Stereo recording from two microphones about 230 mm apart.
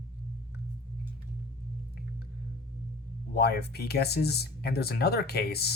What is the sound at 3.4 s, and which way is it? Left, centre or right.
Speech, left.